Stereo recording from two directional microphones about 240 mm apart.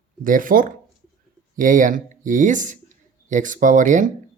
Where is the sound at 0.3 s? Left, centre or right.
Right.